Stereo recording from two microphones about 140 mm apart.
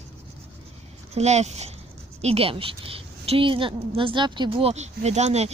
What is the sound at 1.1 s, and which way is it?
A woman's voice, 50° right (ahead or behind).